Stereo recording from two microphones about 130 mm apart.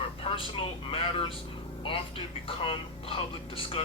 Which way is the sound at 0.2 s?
50° left (ahead or behind).